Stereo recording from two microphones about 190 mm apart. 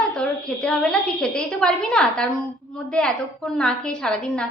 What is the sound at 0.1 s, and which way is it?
A woman's voice, 5° left (ahead or behind).